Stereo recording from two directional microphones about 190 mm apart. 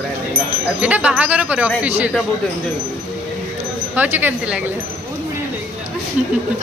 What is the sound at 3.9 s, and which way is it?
Speech, 10° right (ahead or behind).